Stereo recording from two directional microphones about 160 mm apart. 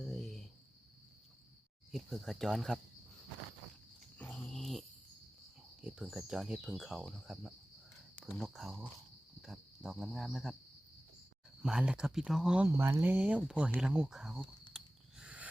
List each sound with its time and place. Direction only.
0.0 s cricket: centre (ahead or behind)
1.9 s speech: centre (ahead or behind)
4.2 s dog: 5° left (ahead or behind)
5.8 s speech: 5° right (ahead or behind)
9.4 s a sound: centre (ahead or behind)
11.6 s speech: 5° right (ahead or behind)
12.6 s speech: 15° right (ahead or behind)
15.2 s a sound: 10° right (ahead or behind)